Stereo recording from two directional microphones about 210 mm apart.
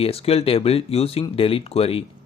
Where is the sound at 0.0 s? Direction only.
30° left (ahead or behind).